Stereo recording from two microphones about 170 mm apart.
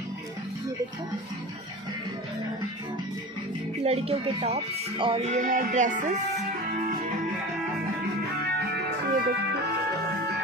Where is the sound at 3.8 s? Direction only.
35° right (ahead or behind).